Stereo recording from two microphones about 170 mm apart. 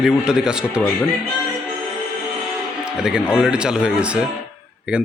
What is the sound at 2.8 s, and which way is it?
Speech, 5° right (ahead or behind).